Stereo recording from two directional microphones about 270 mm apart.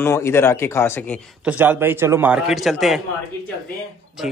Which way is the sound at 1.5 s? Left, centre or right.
Centre.